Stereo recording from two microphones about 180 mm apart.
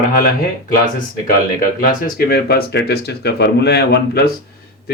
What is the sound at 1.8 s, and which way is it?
Speech, 55° left (ahead or behind).